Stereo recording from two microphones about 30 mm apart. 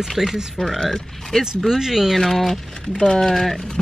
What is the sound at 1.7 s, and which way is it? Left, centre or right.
Speech, centre.